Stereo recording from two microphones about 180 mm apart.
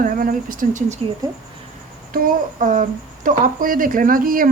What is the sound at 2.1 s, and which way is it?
Speech, 50° right (ahead or behind).